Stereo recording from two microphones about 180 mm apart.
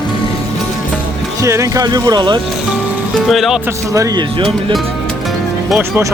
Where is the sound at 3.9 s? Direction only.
15° right (ahead or behind).